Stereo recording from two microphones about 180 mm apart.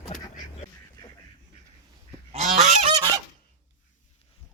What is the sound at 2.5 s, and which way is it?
Goose, 40° right (ahead or behind).